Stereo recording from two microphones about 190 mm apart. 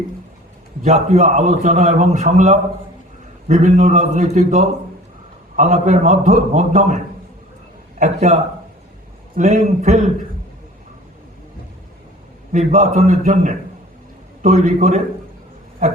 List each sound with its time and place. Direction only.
0.8 s a man's voice: 35° right (ahead or behind)
12.5 s a man's voice: 40° right (ahead or behind)